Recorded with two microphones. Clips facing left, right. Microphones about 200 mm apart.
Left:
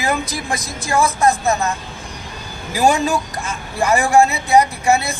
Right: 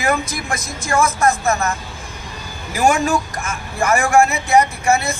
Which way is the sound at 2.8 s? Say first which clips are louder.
Even; 15° left (ahead or behind).